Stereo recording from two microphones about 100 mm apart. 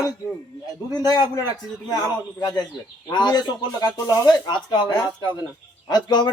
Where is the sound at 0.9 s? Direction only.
40° left (ahead or behind).